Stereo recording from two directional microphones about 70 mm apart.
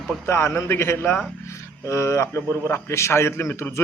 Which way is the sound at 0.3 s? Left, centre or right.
Left.